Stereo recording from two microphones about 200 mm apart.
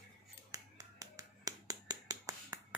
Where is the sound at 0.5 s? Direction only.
15° right (ahead or behind).